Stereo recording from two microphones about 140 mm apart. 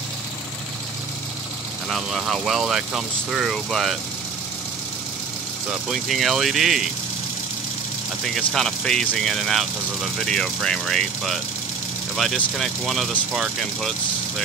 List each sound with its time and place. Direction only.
1.9 s speech: centre (ahead or behind)
5.7 s speech: centre (ahead or behind)
8.5 s speech: 5° left (ahead or behind)